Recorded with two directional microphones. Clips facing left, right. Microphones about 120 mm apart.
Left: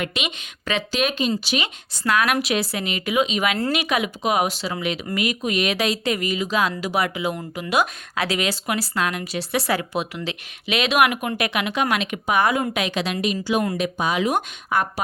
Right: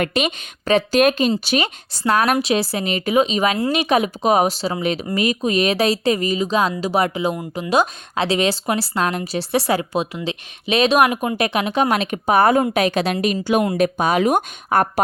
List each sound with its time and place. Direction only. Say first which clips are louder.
0.0 s a woman's voice: right 7 dB; 45° right (ahead or behind)